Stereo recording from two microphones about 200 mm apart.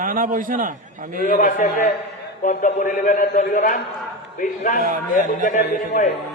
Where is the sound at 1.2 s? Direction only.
40° left (ahead or behind).